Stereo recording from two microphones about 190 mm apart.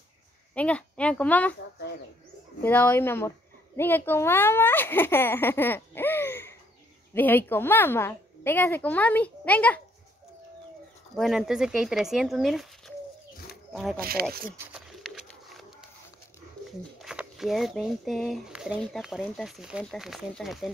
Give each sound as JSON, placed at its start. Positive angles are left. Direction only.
{"t": 0.6, "sound": "a child's voice", "side_deg": 5}
{"t": 2.6, "sound": "a woman's voice", "side_deg": 10}
{"t": 11.1, "sound": "speech", "side_deg": 0}
{"t": 13.9, "sound": "speech", "side_deg": -50}
{"t": 14.7, "sound": "bird", "side_deg": 0}
{"t": 17.0, "sound": "speech", "side_deg": 0}